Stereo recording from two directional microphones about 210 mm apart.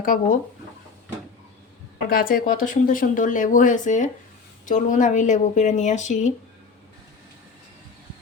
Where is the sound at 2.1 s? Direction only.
45° left (ahead or behind).